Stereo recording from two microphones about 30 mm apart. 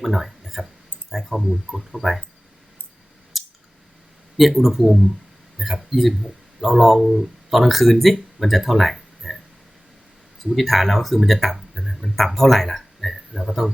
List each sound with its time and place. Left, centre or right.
0.0 s speech: centre
3.3 s scissors: centre
4.4 s speech: centre
10.5 s speech: centre
12.1 s speech: centre